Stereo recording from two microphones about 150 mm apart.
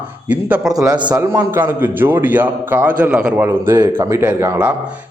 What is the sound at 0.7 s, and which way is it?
A man's voice, 25° right (ahead or behind).